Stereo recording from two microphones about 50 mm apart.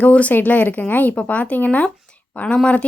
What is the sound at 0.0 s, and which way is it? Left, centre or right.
A woman's voice, left.